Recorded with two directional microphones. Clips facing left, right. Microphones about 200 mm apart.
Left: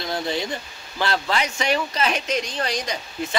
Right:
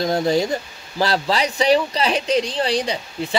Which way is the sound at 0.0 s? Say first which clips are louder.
Right 8 dB; 40° right (ahead or behind).